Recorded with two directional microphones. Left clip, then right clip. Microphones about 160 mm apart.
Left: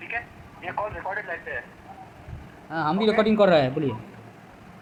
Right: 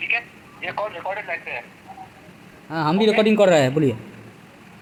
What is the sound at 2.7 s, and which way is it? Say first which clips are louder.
A man's voice: right 4 dB; 55° right (ahead or behind).